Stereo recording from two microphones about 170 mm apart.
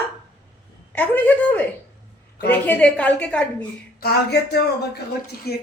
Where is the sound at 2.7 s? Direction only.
5° left (ahead or behind).